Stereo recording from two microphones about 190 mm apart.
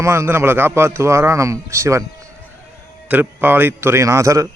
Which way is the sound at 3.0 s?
10° right (ahead or behind).